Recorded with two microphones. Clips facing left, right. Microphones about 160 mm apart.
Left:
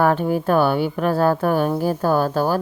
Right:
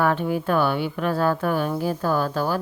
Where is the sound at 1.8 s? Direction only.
45° left (ahead or behind).